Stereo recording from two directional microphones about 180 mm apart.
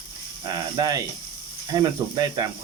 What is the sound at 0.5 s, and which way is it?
Speech, 20° right (ahead or behind).